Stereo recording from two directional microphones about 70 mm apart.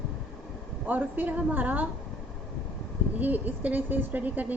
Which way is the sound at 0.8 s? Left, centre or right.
Right.